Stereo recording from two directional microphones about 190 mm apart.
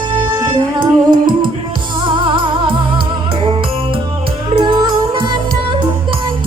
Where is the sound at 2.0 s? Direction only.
25° right (ahead or behind).